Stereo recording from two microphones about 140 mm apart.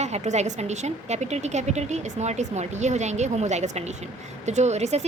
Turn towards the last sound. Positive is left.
turn(degrees=-55)  # may be behind; listen again after turning